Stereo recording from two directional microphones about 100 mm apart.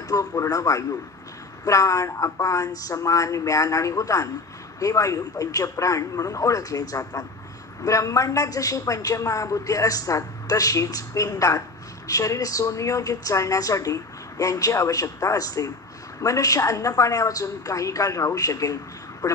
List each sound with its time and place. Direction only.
0.1 s a woman's voice: 35° left (ahead or behind)